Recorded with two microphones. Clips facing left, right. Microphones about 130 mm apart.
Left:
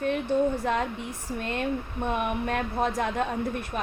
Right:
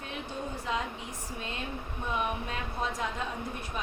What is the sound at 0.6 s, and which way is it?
A woman's voice, 55° left (ahead or behind).